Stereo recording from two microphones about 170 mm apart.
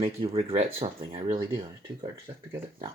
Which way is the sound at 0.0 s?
35° right (ahead or behind).